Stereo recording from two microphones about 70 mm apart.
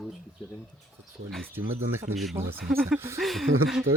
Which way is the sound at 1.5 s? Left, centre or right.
Right.